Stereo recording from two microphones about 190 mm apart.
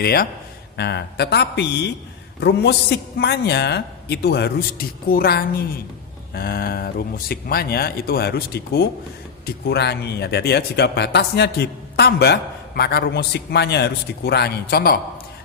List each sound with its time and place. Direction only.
0.0 s speech: 55° left (ahead or behind)